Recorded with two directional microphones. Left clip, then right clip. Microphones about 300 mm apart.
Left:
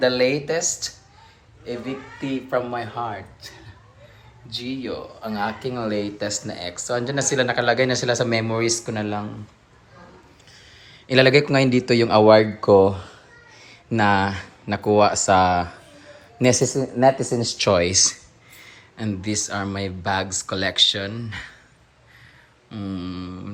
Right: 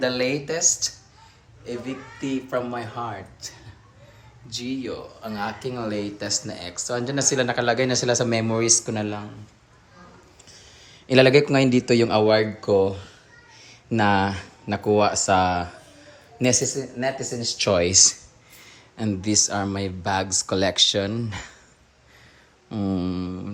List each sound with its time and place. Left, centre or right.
0.0 s speech: centre
10.5 s speech: centre
22.7 s speech: centre